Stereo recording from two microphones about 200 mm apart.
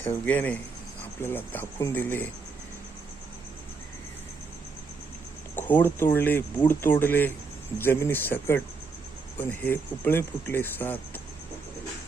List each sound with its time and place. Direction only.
0.3 s speech: 10° left (ahead or behind)
5.5 s speech: 10° left (ahead or behind)